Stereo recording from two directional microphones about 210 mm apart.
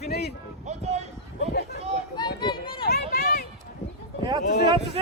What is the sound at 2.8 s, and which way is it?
Run, 45° left (ahead or behind).